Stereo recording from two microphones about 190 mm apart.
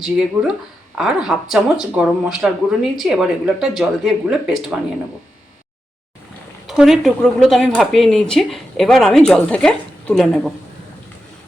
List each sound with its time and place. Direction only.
0.0 s speech: 5° right (ahead or behind)
6.7 s speech: centre (ahead or behind)